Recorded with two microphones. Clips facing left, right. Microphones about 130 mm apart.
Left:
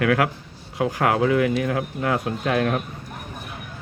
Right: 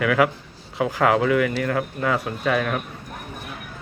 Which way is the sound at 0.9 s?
90° right.